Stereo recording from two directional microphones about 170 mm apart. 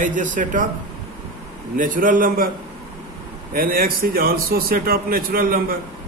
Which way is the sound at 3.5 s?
55° right (ahead or behind).